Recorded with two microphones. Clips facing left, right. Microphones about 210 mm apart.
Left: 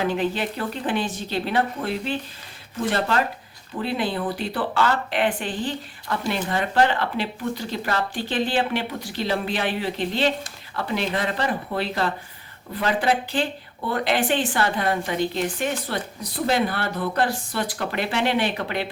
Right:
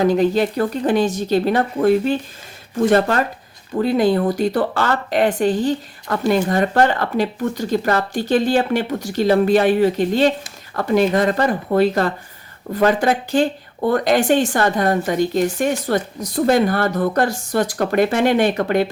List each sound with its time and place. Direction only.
0.0 s speech: 40° right (ahead or behind)